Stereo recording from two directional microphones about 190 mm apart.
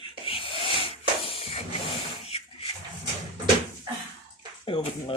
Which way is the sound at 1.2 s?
30° left (ahead or behind).